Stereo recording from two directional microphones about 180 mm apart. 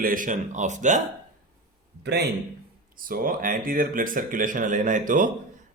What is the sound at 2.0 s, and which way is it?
Speech, 70° right (ahead or behind).